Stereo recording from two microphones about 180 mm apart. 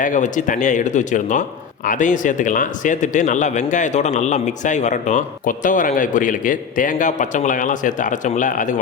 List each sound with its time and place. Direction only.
0.0 s speech: 45° left (ahead or behind)